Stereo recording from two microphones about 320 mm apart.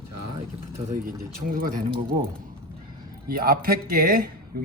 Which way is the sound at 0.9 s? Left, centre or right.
Right.